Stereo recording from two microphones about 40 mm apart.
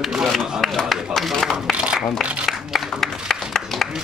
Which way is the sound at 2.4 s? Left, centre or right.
Centre.